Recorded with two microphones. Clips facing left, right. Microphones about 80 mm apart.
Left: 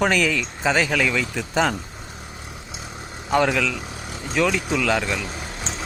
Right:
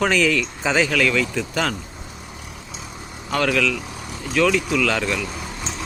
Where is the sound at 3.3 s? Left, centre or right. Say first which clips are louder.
Left 1 dB; centre.